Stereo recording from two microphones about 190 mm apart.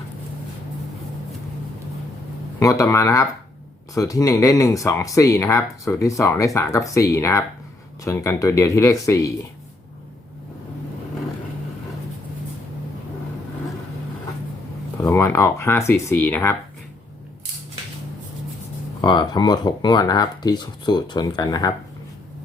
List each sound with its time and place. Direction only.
2.6 s speech: 15° left (ahead or behind)
15.0 s speech: 15° left (ahead or behind)
19.0 s speech: 20° left (ahead or behind)